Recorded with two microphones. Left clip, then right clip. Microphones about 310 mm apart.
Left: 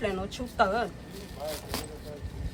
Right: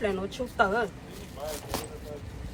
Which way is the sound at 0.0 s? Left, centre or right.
Centre.